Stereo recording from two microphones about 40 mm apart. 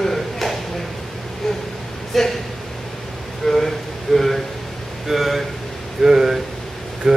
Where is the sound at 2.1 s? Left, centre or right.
Centre.